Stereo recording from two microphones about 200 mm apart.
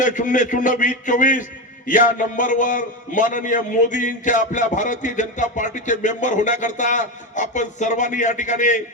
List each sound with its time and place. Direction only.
0.0 s a man's voice: 40° left (ahead or behind)